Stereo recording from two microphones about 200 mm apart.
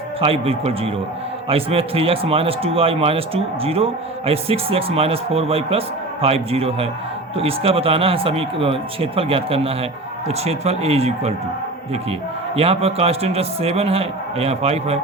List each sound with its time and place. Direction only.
0.2 s a man's voice: 30° right (ahead or behind)
12.5 s a man's voice: 30° right (ahead or behind)